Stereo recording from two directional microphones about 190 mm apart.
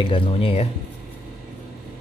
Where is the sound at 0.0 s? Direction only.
30° left (ahead or behind).